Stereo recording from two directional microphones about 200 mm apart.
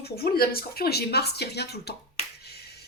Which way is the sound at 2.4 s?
55° left (ahead or behind).